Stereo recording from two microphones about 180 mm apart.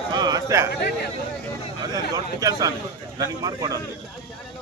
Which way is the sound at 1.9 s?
20° right (ahead or behind).